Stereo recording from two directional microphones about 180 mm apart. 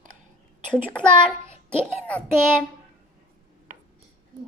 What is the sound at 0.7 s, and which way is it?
Speech, 5° left (ahead or behind).